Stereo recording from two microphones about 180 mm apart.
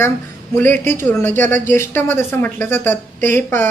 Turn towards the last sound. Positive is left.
turn(degrees=10)  # may be behind; listen again after turning